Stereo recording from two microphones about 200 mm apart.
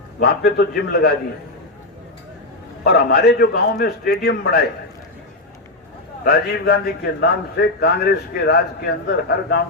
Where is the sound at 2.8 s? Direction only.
55° left (ahead or behind).